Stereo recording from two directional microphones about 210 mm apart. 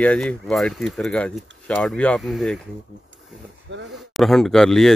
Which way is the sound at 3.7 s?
60° right (ahead or behind).